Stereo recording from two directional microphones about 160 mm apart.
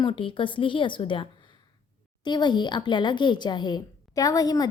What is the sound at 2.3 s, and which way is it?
A woman's voice, 30° left (ahead or behind).